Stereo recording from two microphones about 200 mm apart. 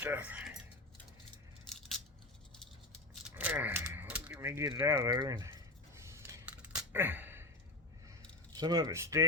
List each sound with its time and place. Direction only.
0.0 s speech: 10° right (ahead or behind)
3.2 s typing: 5° right (ahead or behind)
4.8 s a sound: 15° right (ahead or behind)
8.5 s speech: 20° right (ahead or behind)